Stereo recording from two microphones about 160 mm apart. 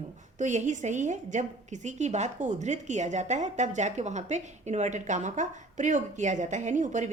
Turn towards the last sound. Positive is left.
turn(degrees=-50)  # may be behind; listen again after turning